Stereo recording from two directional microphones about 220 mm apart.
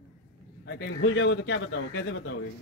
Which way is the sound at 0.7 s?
55° left (ahead or behind).